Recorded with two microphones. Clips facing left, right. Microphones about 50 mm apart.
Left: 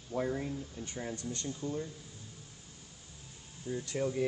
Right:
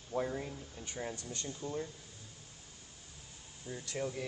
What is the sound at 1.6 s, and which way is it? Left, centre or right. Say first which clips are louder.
Speech: left 3 dB; right.